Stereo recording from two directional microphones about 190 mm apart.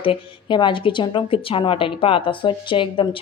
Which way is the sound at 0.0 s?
25° left (ahead or behind).